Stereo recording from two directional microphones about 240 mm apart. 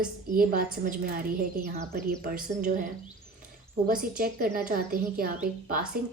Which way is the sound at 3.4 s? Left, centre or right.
Right.